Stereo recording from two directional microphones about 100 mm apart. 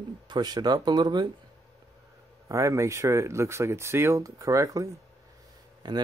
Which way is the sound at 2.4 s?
30° right (ahead or behind).